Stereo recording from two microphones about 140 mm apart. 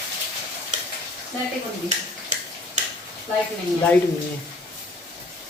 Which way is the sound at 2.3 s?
60° right (ahead or behind).